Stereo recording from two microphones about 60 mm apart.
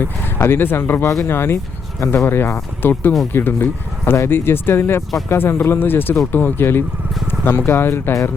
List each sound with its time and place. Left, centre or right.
0.0 s speech: left